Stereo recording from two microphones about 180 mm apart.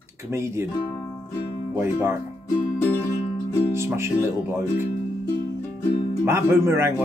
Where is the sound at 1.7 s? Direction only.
15° right (ahead or behind).